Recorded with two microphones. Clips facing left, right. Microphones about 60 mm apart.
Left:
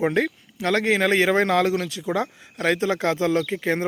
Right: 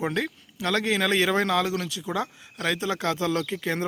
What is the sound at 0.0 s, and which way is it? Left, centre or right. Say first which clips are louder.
Speech: left 6 dB; left.